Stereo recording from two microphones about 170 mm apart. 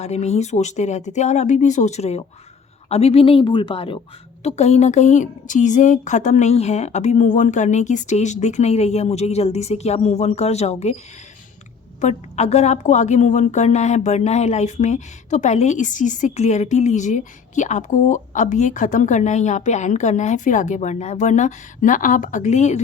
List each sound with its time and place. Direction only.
0.0 s a woman's voice: 40° left (ahead or behind)
11.9 s a woman's voice: 45° left (ahead or behind)